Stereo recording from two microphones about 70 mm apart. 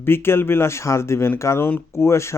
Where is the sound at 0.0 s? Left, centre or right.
Left.